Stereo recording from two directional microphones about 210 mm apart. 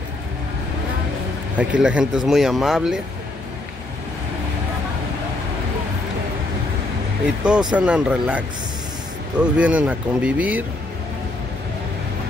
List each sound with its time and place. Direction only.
1.6 s speech: 5° right (ahead or behind)
7.4 s speech: 5° right (ahead or behind)